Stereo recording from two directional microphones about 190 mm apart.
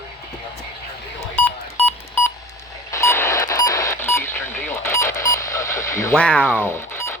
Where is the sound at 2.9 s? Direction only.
15° left (ahead or behind).